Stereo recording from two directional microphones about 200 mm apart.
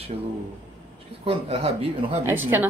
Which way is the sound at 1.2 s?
30° right (ahead or behind).